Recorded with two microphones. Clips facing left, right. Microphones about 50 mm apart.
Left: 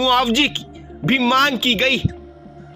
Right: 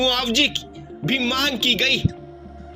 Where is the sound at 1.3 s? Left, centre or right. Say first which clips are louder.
Left 7 dB; left.